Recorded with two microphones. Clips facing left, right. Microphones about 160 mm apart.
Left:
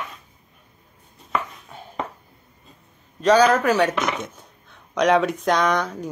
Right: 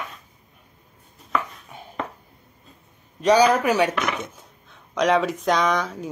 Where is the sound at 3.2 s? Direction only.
15° right (ahead or behind).